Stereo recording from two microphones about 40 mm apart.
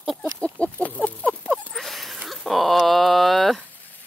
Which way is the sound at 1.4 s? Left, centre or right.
Centre.